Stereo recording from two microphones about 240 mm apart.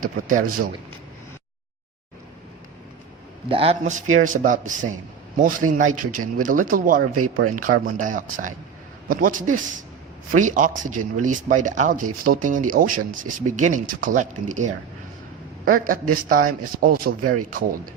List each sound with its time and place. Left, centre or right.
0.0 s speech: right
3.5 s a man's voice: right
7.0 s speech: right
7.7 s speech: right
16.5 s speech: right
17.2 s speech: right